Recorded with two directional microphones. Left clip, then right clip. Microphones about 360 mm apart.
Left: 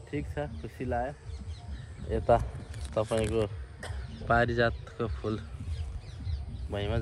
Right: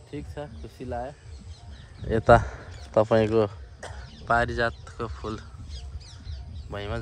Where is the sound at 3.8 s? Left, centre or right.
Right.